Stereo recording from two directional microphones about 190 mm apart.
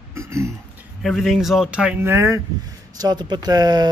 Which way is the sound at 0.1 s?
15° right (ahead or behind).